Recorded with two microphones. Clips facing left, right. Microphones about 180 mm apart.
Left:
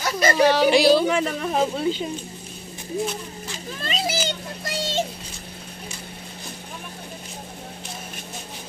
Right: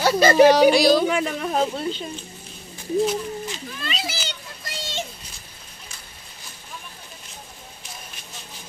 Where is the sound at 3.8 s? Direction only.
45° left (ahead or behind).